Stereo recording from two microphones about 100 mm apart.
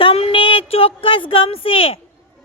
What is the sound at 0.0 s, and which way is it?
A woman's voice, 70° left (ahead or behind).